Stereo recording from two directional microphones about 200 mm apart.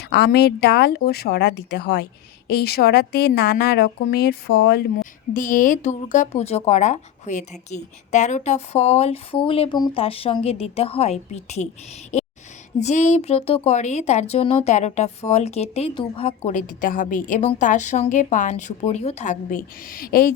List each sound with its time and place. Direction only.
0.0 s a woman's voice: 55° left (ahead or behind)
5.3 s speech: 40° left (ahead or behind)
12.8 s speech: 35° left (ahead or behind)